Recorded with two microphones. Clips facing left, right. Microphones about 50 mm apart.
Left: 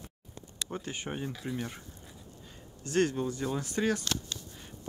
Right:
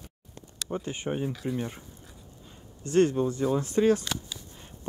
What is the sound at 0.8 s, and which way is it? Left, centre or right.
Speech, right.